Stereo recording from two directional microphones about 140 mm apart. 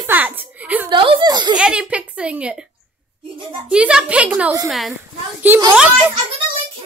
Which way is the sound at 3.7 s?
5° right (ahead or behind).